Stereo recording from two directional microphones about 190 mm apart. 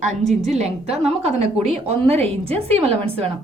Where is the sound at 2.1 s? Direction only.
35° right (ahead or behind).